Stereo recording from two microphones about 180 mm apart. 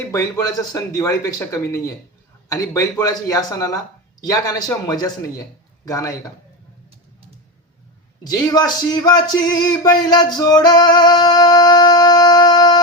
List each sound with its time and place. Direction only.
0.1 s a man's voice: 20° left (ahead or behind)
8.3 s speech: 20° left (ahead or behind)